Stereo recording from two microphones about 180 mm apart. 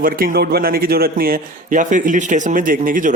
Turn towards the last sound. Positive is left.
turn(degrees=-50)  # may be behind; listen again after turning